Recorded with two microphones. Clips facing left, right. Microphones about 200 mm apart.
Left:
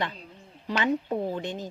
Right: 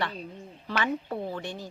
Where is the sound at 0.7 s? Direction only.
15° left (ahead or behind).